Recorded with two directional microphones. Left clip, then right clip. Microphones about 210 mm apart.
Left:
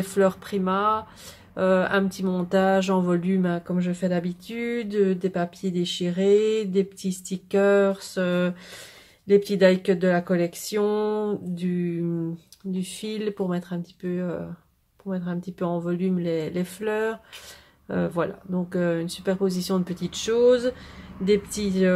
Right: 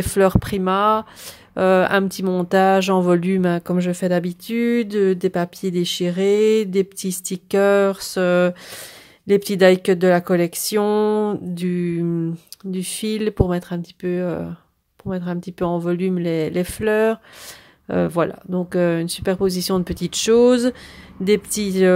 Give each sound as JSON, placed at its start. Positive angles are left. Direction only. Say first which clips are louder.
{"t": 0.0, "sound": "speech", "louder": "right 5 dB", "side_deg": -40}